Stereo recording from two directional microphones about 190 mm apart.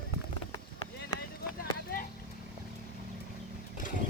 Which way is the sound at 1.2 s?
50° left (ahead or behind).